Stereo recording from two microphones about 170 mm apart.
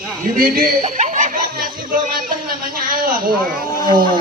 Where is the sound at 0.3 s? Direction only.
60° right (ahead or behind).